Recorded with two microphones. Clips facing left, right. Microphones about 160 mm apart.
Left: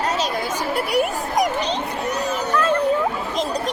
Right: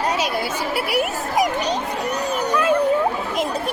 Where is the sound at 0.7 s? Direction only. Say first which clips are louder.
Left 2 dB; 5° right (ahead or behind).